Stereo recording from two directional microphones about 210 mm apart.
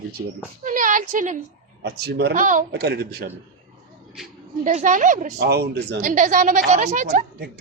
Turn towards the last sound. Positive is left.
turn(degrees=-40)  # may be behind; listen again after turning